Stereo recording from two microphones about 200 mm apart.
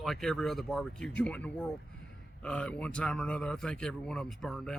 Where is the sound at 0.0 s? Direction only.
Centre (ahead or behind).